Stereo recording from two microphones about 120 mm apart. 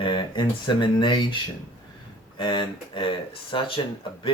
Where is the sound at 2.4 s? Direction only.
45° left (ahead or behind).